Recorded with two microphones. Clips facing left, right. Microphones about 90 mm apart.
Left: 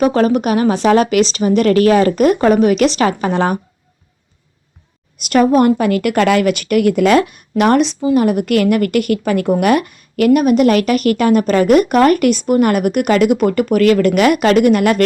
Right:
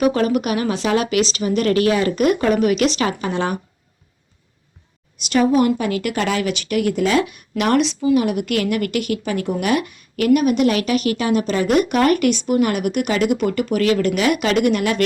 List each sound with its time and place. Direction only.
0.0 s speech: 35° left (ahead or behind)
5.2 s a woman's voice: 50° left (ahead or behind)